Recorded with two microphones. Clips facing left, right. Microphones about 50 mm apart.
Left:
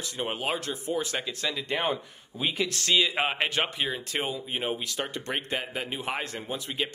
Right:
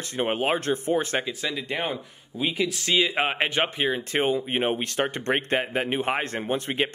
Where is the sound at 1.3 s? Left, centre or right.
Centre.